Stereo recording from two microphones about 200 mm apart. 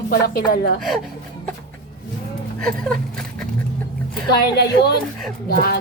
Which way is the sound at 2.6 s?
5° left (ahead or behind).